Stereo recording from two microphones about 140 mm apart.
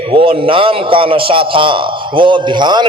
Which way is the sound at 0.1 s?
40° right (ahead or behind).